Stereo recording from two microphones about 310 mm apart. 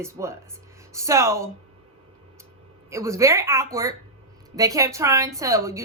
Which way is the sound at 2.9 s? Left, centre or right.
Centre.